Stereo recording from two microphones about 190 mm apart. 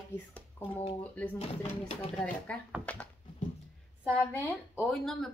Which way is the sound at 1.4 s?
30° left (ahead or behind).